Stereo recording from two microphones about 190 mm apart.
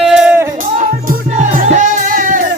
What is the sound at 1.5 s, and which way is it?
Music, 40° right (ahead or behind).